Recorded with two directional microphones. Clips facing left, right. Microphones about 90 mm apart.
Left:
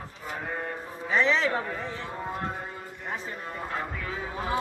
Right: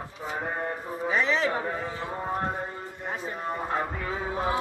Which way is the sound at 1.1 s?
10° right (ahead or behind).